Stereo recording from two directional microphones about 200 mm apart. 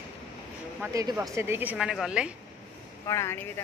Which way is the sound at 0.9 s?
15° right (ahead or behind).